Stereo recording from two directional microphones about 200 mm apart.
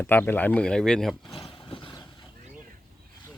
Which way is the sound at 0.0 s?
10° left (ahead or behind).